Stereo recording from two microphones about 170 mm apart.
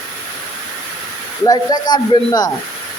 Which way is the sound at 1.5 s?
25° left (ahead or behind).